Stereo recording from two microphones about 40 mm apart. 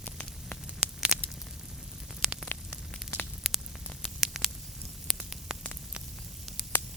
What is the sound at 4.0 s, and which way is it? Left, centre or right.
Patter, centre.